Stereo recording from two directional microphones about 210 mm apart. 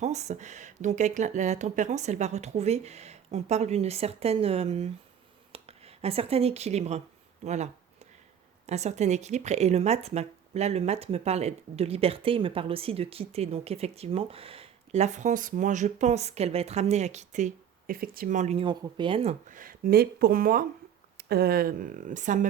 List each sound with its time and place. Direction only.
0.0 s speech: 30° right (ahead or behind)